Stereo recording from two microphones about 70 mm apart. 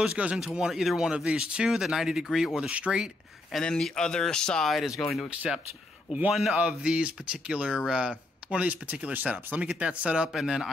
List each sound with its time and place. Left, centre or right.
0.0 s speech: centre
3.6 s speech: centre
6.5 s speech: centre